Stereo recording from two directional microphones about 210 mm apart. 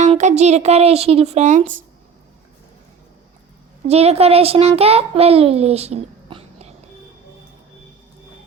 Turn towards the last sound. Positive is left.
turn(degrees=-30)  # may be behind; listen again after turning